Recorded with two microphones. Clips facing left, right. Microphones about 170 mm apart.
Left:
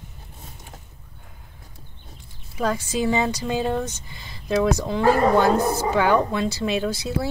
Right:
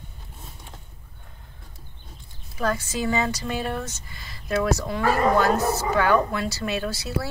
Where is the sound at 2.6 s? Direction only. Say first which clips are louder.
Left 2 dB; 15° left (ahead or behind).